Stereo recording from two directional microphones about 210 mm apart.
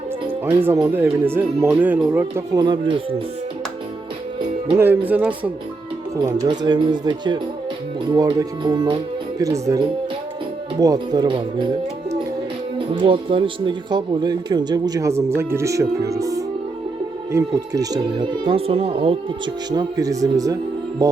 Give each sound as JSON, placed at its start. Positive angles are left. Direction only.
{"t": 0.4, "sound": "speech", "side_deg": -10}
{"t": 4.8, "sound": "speech", "side_deg": -10}
{"t": 12.9, "sound": "speech", "side_deg": -25}
{"t": 21.0, "sound": "music", "side_deg": -15}